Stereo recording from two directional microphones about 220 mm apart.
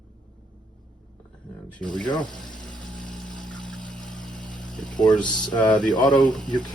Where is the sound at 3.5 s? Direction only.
5° left (ahead or behind).